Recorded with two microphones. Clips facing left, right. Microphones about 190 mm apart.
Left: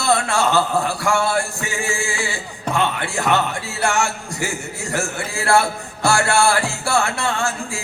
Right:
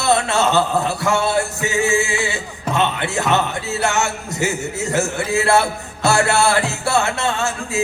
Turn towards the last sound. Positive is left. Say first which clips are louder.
# right 1 dB
turn(degrees=-20)  # may be behind; listen again after turning